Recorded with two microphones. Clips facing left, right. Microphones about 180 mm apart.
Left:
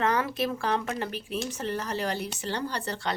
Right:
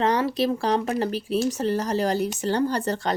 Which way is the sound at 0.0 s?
30° right (ahead or behind).